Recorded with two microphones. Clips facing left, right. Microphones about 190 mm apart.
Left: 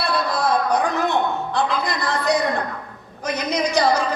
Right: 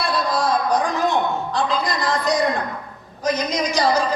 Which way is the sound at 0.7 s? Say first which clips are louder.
Even; 60° left (ahead or behind).